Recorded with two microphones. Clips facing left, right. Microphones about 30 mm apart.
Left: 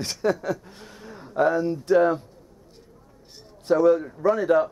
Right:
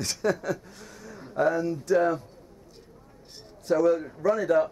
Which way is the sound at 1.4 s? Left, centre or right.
Left.